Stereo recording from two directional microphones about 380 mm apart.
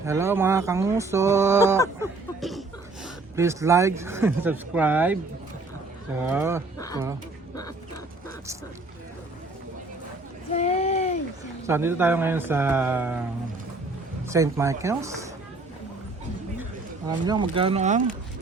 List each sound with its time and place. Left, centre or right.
0.0 s speech: centre
6.3 s speech: centre
6.7 s a sound: centre
10.5 s a sound: centre
11.6 s speech: centre
14.3 s speech: centre
17.2 s speech: centre